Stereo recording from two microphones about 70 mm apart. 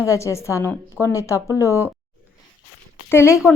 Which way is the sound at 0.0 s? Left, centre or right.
Left.